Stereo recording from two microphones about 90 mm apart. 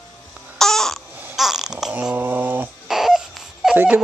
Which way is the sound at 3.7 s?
15° right (ahead or behind).